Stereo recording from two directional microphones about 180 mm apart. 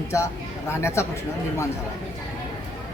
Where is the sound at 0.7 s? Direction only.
15° left (ahead or behind).